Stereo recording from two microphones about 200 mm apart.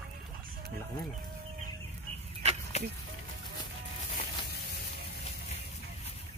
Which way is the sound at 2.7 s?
35° left (ahead or behind).